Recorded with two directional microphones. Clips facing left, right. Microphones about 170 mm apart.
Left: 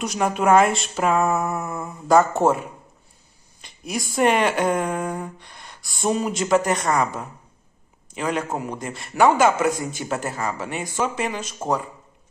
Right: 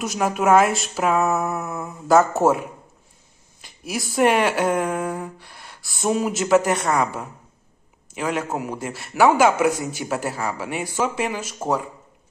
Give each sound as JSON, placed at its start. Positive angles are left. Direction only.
{"t": 0.0, "sound": "speech", "side_deg": -5}
{"t": 3.6, "sound": "a man's voice", "side_deg": -5}